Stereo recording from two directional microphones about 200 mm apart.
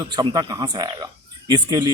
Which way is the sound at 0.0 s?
20° right (ahead or behind).